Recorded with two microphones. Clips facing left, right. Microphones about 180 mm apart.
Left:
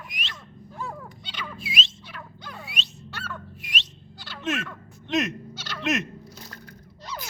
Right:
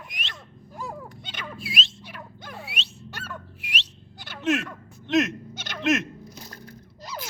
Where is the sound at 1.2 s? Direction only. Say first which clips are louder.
Left 1 dB; 50° right (ahead or behind).